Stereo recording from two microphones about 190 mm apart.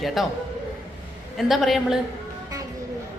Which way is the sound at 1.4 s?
Centre (ahead or behind).